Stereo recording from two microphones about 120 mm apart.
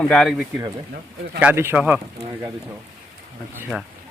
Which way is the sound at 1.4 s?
15° right (ahead or behind).